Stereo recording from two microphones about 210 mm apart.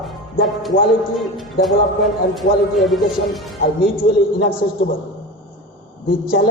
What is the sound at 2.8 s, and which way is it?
Speech, centre (ahead or behind).